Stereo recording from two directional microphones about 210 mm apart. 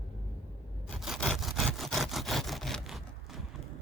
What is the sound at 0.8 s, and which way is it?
Sawing, centre (ahead or behind).